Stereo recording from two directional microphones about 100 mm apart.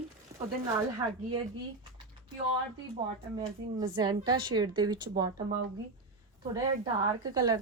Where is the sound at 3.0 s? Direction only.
55° right (ahead or behind).